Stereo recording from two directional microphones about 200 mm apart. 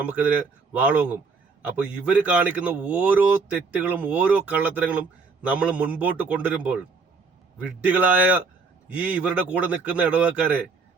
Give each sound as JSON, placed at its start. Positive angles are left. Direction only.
{"t": 0.0, "sound": "speech", "side_deg": -5}